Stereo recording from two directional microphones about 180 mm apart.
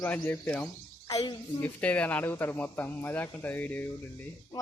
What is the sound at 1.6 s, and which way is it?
Speech, 10° left (ahead or behind).